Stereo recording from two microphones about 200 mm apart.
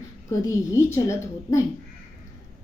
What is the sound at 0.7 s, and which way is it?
Speech, 15° left (ahead or behind).